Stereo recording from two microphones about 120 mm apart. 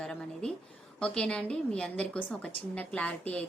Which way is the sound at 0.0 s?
5° left (ahead or behind).